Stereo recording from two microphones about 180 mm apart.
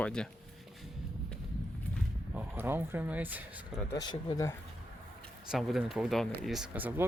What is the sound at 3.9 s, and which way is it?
Speech, 20° left (ahead or behind).